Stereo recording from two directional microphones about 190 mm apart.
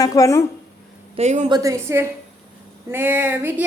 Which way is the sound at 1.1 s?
35° right (ahead or behind).